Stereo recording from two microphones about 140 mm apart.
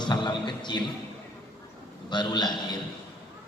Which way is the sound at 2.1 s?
30° left (ahead or behind).